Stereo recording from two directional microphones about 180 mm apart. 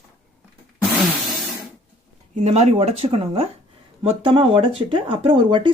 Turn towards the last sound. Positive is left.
turn(degrees=-25)  # may be behind; listen again after turning